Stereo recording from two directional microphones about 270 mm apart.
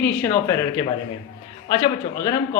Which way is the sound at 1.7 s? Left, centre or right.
Centre.